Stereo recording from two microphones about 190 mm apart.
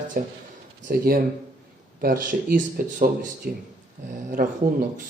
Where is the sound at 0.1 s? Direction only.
45° right (ahead or behind).